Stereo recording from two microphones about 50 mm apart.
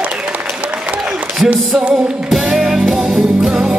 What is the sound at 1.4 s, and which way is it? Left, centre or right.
Music, right.